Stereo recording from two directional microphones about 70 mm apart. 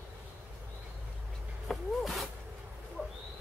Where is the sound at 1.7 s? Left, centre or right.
Centre.